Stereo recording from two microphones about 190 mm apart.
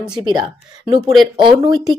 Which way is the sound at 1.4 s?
25° right (ahead or behind).